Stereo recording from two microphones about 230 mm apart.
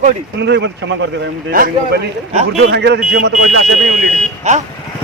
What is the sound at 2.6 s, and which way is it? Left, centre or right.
Speech, right.